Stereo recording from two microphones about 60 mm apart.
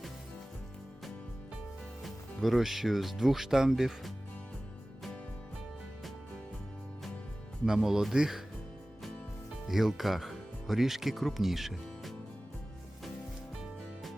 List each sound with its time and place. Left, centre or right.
2.0 s speech: centre
7.6 s speech: centre
9.6 s speech: centre